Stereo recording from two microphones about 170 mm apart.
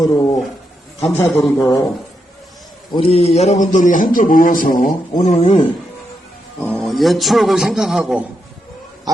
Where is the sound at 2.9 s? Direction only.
35° left (ahead or behind); by 4.9 s 55° left (ahead or behind).